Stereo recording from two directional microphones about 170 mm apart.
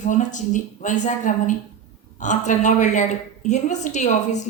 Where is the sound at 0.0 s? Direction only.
45° left (ahead or behind).